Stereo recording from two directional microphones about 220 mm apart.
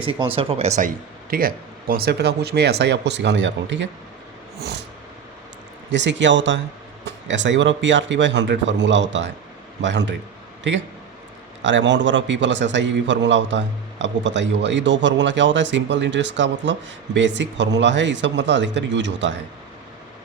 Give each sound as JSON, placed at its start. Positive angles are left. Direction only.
{"t": 0.0, "sound": "speech", "side_deg": -25}
{"t": 0.8, "sound": "speech", "side_deg": -40}
{"t": 5.9, "sound": "a man's voice", "side_deg": -55}